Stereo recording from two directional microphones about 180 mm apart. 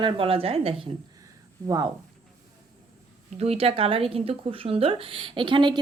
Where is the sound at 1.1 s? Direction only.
20° right (ahead or behind).